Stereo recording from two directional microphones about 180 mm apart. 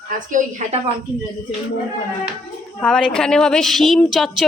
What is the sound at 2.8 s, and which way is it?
A woman's voice, 5° left (ahead or behind).